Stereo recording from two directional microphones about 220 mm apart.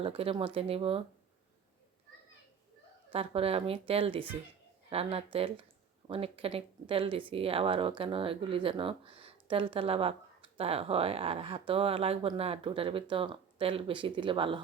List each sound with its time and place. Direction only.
0.0 s speech: 25° right (ahead or behind)
3.1 s speech: 25° right (ahead or behind)